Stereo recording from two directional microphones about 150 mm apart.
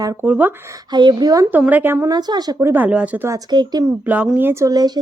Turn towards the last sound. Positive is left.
turn(degrees=-25)  # may be behind; listen again after turning